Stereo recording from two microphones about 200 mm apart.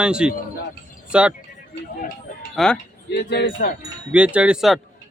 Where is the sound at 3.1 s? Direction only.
55° left (ahead or behind).